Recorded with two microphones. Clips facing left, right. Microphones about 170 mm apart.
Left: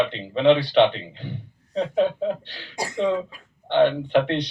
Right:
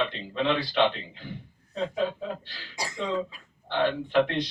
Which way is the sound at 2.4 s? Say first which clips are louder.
Left 6 dB; 50° left (ahead or behind).